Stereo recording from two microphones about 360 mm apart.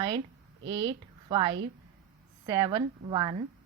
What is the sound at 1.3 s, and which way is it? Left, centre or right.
Speech, centre.